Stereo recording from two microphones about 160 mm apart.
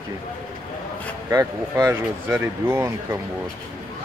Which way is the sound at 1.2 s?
20° right (ahead or behind).